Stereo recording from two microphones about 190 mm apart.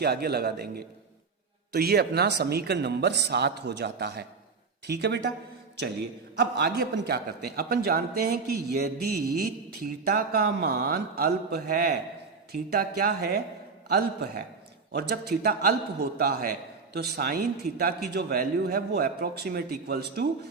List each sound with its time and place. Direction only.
0.0 s a man's voice: 55° right (ahead or behind)
6.3 s a man's voice: 60° right (ahead or behind)